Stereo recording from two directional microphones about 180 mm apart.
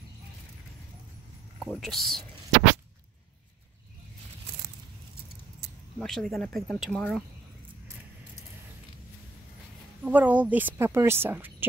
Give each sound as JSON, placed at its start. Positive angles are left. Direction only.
{"t": 1.6, "sound": "speech", "side_deg": 0}
{"t": 5.6, "sound": "keys jangling", "side_deg": -65}
{"t": 5.9, "sound": "speech", "side_deg": 0}
{"t": 10.0, "sound": "a woman's voice", "side_deg": -10}